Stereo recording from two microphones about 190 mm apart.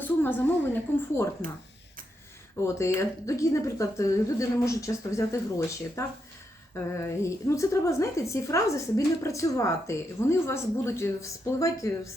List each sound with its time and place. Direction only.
0.0 s a woman's voice: 10° left (ahead or behind)
2.6 s a woman's voice: 15° left (ahead or behind)